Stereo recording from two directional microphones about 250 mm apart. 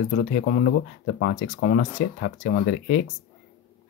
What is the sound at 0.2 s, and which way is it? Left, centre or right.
Speech, left.